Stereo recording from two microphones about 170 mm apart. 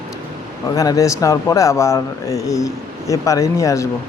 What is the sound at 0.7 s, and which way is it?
Speech, 20° left (ahead or behind).